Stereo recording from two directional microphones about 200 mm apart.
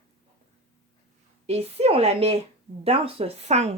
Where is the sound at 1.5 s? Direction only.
30° right (ahead or behind).